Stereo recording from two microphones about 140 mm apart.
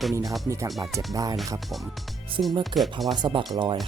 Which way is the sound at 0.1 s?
25° right (ahead or behind).